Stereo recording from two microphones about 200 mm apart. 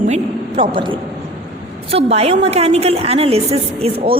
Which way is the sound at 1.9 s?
30° right (ahead or behind).